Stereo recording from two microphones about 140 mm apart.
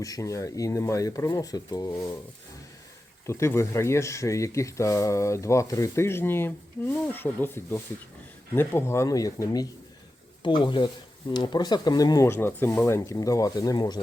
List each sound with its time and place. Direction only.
0.0 s speech: 25° left (ahead or behind)
3.2 s speech: 20° left (ahead or behind)